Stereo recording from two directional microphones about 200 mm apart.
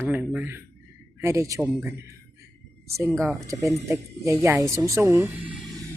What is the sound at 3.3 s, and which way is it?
Speech, 15° right (ahead or behind).